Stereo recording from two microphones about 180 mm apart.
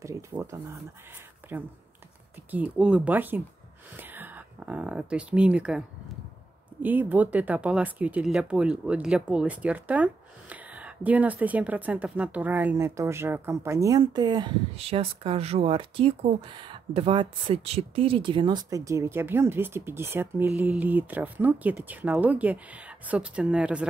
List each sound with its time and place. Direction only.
0.0 s speech: 15° right (ahead or behind)
1.4 s a sound: 10° right (ahead or behind)
2.5 s speech: 5° right (ahead or behind)